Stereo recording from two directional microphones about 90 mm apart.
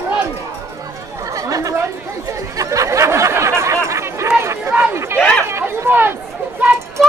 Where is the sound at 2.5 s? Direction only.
35° right (ahead or behind).